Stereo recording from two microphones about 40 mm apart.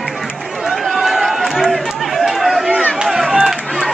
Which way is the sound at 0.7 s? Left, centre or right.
Centre.